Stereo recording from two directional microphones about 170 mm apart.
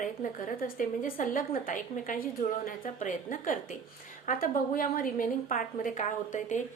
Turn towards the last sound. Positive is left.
turn(degrees=45)  # may be behind; listen again after turning